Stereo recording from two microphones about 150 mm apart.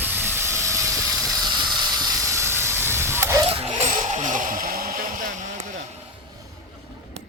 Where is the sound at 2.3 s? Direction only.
15° right (ahead or behind).